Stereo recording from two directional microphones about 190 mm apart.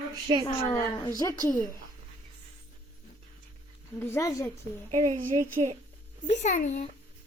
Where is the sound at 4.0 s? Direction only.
15° left (ahead or behind).